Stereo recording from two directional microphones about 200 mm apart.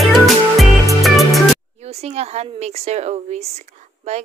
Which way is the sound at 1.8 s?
30° right (ahead or behind).